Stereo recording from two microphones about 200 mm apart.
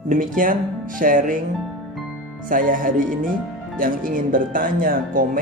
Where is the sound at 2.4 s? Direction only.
45° right (ahead or behind).